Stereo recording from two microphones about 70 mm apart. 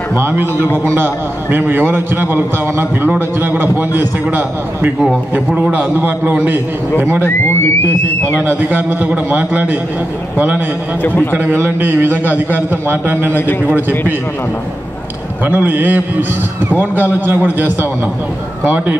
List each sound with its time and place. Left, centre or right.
0.2 s a man's voice: right
8.5 s a man's voice: right
11.0 s a man's voice: left
11.5 s a man's voice: right
15.4 s a man's voice: right